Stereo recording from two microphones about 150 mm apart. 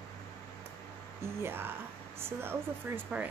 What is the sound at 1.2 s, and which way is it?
Speech, 15° right (ahead or behind).